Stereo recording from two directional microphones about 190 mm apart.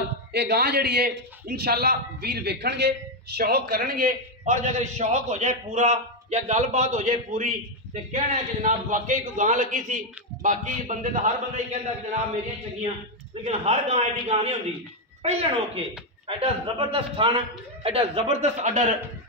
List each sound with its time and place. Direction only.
0.3 s a man's voice: 60° right (ahead or behind); by 11.6 s 40° right (ahead or behind)
13.4 s a man's voice: 35° right (ahead or behind)